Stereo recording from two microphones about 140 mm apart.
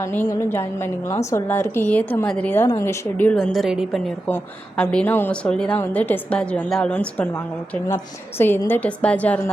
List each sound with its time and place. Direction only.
0.0 s a woman's voice: 15° left (ahead or behind)